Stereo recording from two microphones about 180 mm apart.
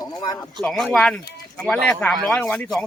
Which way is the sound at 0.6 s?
Centre (ahead or behind).